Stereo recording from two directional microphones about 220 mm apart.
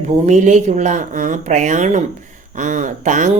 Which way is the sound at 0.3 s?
35° right (ahead or behind).